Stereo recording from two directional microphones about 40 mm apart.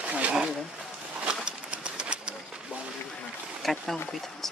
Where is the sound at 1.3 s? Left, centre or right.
Right.